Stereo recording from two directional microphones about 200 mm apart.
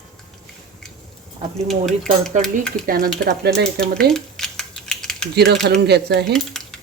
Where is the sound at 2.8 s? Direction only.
45° right (ahead or behind).